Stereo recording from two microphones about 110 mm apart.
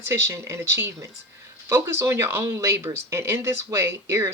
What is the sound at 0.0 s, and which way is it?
Speech, 25° right (ahead or behind).